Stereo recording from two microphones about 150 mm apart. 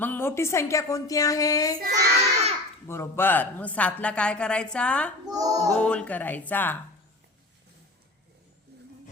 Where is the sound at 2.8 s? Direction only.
15° left (ahead or behind).